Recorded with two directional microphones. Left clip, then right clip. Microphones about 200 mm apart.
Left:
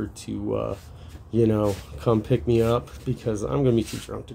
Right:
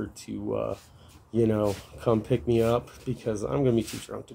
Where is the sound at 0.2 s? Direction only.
5° right (ahead or behind).